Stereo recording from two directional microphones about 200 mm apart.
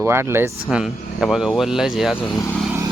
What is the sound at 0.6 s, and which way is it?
Speech, centre (ahead or behind).